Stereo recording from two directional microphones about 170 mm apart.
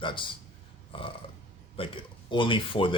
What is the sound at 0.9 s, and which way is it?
Speech, 30° left (ahead or behind).